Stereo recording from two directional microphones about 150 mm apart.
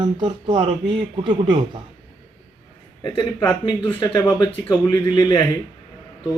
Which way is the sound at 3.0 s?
25° left (ahead or behind).